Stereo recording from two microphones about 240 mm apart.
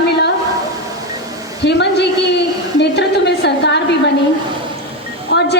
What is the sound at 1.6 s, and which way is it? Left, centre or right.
A woman's voice, left.